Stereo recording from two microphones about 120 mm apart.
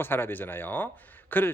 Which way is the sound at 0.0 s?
20° left (ahead or behind).